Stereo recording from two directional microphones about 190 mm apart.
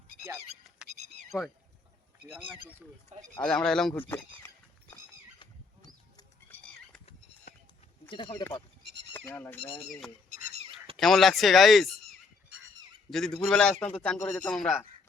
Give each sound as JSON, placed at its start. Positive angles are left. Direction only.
{"t": 0.9, "sound": "a sound", "side_deg": -40}
{"t": 3.1, "sound": "speech", "side_deg": -40}
{"t": 3.4, "sound": "a man's voice", "side_deg": 5}
{"t": 4.1, "sound": "horse", "side_deg": 10}
{"t": 8.3, "sound": "speech", "side_deg": 15}
{"t": 9.6, "sound": "speech", "side_deg": 25}
{"t": 10.5, "sound": "fowl", "side_deg": -30}
{"t": 10.9, "sound": "a man's voice", "side_deg": 0}
{"t": 13.1, "sound": "a man's voice", "side_deg": 5}